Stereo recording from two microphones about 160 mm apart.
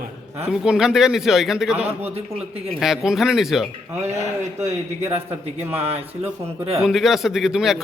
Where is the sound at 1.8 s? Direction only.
40° right (ahead or behind).